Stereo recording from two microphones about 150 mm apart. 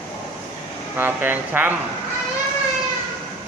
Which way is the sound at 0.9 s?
15° right (ahead or behind).